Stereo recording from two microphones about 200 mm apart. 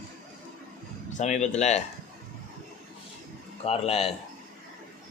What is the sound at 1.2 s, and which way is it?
Speech, 35° left (ahead or behind).